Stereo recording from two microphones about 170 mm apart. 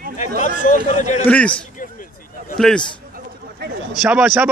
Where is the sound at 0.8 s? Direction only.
40° left (ahead or behind).